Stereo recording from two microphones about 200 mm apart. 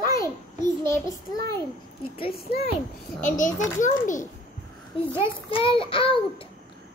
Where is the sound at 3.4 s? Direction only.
40° left (ahead or behind).